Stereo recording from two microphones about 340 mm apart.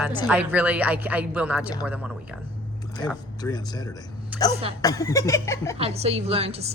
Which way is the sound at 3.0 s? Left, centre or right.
Centre.